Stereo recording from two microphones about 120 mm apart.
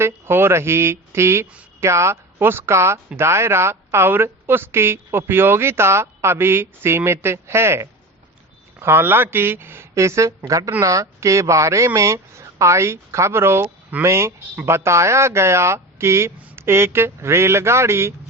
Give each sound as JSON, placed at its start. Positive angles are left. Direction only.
{"t": 0.0, "sound": "speech", "side_deg": -20}